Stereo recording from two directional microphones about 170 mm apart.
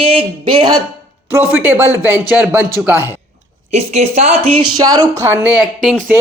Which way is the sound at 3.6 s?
40° right (ahead or behind).